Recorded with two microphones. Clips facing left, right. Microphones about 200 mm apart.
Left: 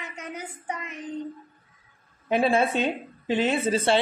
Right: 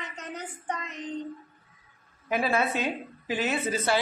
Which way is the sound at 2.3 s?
30° left (ahead or behind).